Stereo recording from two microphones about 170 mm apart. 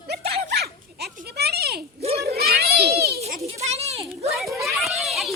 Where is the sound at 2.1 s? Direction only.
65° right (ahead or behind).